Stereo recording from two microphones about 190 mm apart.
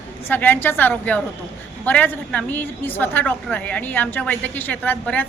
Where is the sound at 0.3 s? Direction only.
10° left (ahead or behind).